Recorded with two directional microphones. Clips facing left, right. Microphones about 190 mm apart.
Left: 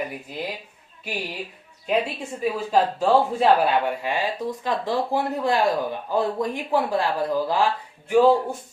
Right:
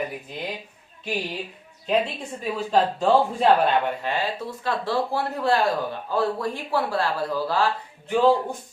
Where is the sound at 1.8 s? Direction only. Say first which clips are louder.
Even; 5° left (ahead or behind).